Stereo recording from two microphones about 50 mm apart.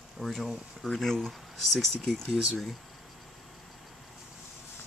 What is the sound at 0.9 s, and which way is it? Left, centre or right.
Speech, centre.